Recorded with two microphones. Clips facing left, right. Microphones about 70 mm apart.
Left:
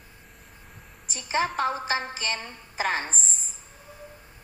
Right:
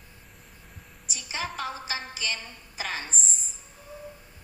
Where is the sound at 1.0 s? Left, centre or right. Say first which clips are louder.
Left 8 dB; left.